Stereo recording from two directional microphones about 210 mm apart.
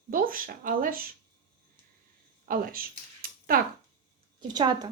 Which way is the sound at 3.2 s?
45° right (ahead or behind).